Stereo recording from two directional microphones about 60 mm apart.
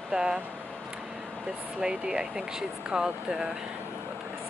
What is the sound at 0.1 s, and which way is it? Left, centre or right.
Speech, centre.